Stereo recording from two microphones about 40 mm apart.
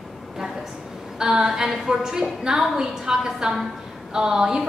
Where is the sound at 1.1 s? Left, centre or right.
Centre.